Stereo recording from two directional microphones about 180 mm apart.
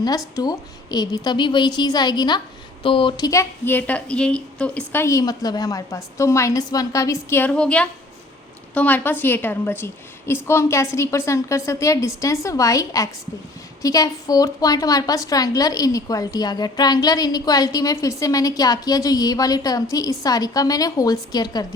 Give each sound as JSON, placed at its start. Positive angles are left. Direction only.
{"t": 0.3, "sound": "a woman's voice", "side_deg": 20}